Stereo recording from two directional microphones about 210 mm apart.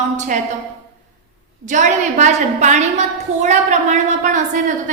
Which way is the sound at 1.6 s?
35° right (ahead or behind).